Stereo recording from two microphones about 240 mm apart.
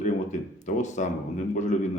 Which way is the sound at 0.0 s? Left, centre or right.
Left.